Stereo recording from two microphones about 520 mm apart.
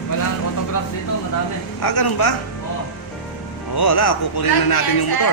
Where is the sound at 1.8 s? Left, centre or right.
Left.